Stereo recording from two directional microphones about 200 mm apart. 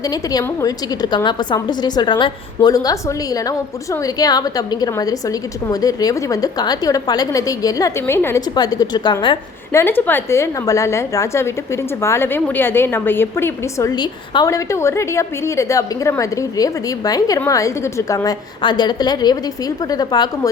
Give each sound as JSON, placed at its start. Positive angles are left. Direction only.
{"t": 0.1, "sound": "a woman's voice", "side_deg": 20}
{"t": 4.0, "sound": "a woman's voice", "side_deg": 20}
{"t": 9.8, "sound": "a woman's voice", "side_deg": 10}